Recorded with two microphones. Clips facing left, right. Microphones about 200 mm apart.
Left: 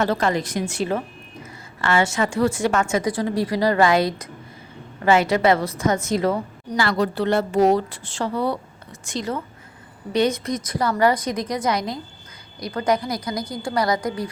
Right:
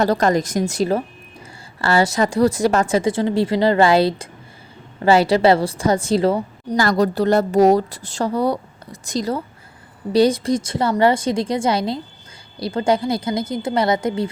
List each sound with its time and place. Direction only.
0.0 s a woman's voice: 40° right (ahead or behind)
6.7 s a woman's voice: 40° right (ahead or behind); by 14.3 s 25° right (ahead or behind)